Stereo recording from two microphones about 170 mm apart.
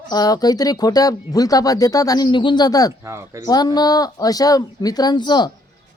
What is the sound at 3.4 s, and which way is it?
Speech, 25° left (ahead or behind).